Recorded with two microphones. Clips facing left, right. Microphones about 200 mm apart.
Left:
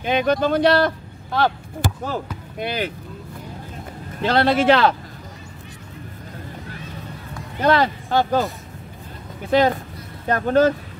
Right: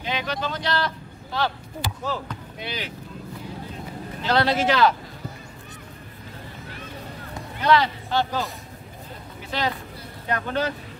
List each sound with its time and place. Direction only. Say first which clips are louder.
0.0 s speech: left 9 dB; 50° left (ahead or behind)
4.2 s speech: left 4 dB; 55° left (ahead or behind)
7.6 s speech: left 2 dB; 50° left (ahead or behind)
9.5 s speech: left 10 dB; 50° left (ahead or behind)